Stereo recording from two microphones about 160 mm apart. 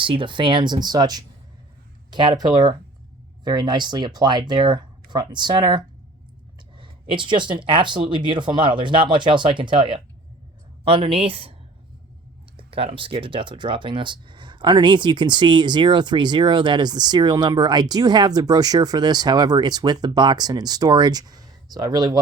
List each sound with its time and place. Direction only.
0.0 s speech: 30° right (ahead or behind)
12.5 s speech: 35° right (ahead or behind)